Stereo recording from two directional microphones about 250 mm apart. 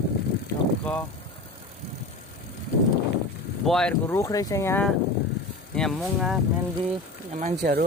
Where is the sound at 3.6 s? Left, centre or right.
Centre.